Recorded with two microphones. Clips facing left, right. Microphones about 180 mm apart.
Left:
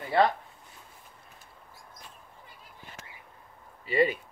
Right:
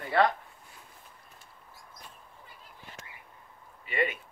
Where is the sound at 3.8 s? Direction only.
35° left (ahead or behind).